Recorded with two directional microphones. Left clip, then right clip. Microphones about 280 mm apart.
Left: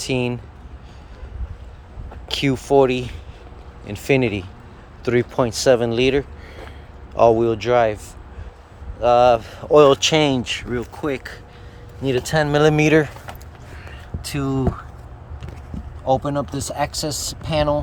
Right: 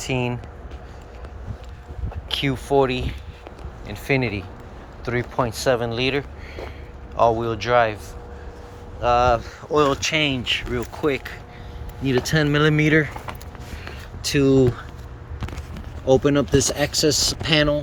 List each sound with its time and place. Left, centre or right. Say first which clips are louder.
0.0 s speech: left 2 dB; left
2.3 s speech: left 3 dB; left
9.0 s speech: left 4 dB; left
16.0 s speech: right 2 dB; centre